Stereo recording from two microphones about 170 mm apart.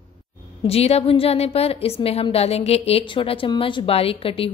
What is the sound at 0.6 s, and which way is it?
A woman's voice, 35° left (ahead or behind).